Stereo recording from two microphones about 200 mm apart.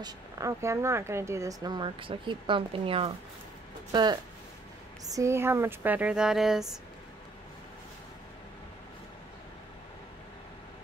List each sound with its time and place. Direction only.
0.0 s speech: 15° right (ahead or behind)